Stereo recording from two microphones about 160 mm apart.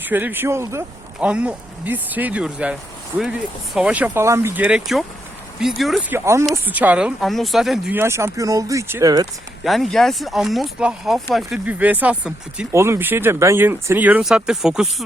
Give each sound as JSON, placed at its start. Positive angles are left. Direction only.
{"t": 0.0, "sound": "speech", "side_deg": -10}
{"t": 6.1, "sound": "speech", "side_deg": -15}
{"t": 7.9, "sound": "speech", "side_deg": -15}
{"t": 9.6, "sound": "speech", "side_deg": 0}